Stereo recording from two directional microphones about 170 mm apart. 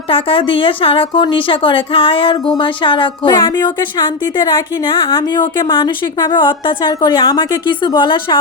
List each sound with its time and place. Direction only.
0.1 s a woman's voice: 30° left (ahead or behind)